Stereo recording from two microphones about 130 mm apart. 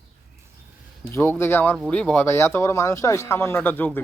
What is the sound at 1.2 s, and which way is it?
Speech, 20° left (ahead or behind).